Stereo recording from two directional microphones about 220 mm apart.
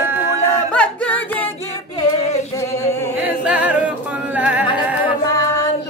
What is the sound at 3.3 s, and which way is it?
A capella, 5° right (ahead or behind).